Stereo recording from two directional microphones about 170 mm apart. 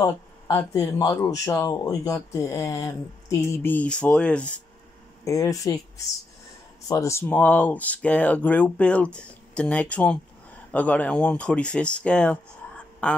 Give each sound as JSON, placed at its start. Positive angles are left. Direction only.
{"t": 0.0, "sound": "speech", "side_deg": 15}
{"t": 5.2, "sound": "speech", "side_deg": 20}